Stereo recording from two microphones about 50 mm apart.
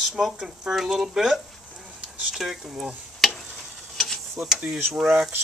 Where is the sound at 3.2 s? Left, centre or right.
Centre.